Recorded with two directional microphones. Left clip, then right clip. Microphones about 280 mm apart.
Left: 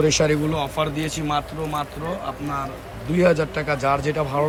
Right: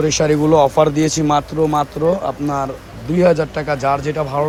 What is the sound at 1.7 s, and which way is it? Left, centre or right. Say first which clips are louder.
Speech: right 11 dB; left.